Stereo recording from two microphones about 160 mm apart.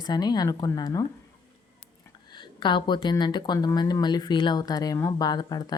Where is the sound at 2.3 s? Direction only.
30° left (ahead or behind).